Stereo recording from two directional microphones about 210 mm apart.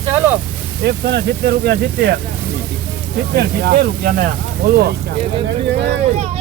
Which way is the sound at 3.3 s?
50° right (ahead or behind).